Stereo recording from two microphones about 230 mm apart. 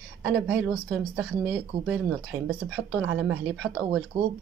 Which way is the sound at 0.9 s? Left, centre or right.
Centre.